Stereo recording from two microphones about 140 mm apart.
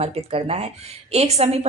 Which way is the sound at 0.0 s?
45° right (ahead or behind).